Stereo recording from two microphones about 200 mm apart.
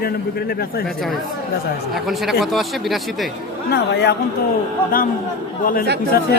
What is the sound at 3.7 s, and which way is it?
Speech, 55° left (ahead or behind).